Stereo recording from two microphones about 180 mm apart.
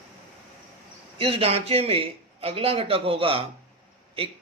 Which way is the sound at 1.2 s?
30° right (ahead or behind).